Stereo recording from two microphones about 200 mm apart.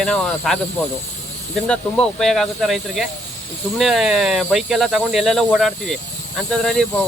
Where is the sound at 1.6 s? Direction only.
5° left (ahead or behind).